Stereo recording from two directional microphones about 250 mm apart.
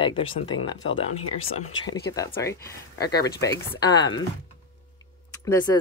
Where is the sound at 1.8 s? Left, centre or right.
Centre.